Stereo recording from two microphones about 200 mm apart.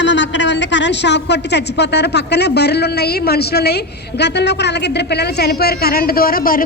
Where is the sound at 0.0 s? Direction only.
65° left (ahead or behind).